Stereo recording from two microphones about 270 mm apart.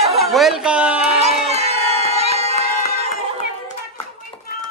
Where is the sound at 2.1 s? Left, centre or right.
Right.